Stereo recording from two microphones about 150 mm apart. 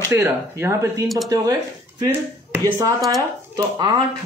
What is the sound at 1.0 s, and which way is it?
Speech, centre (ahead or behind).